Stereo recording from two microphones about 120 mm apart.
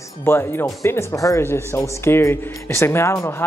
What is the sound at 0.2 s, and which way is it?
Speech, 20° left (ahead or behind).